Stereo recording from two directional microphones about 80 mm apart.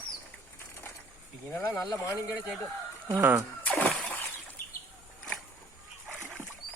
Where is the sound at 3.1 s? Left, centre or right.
Right.